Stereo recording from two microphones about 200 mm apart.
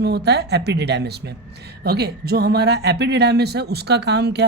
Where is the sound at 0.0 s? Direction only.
55° right (ahead or behind).